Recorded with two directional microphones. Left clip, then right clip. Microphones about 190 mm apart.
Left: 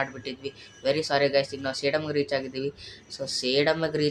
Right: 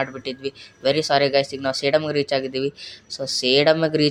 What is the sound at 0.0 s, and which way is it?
Speech, 35° right (ahead or behind).